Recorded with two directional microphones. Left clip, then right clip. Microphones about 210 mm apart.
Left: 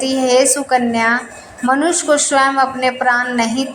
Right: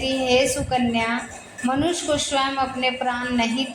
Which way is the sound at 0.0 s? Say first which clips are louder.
Left 6 dB; 25° left (ahead or behind).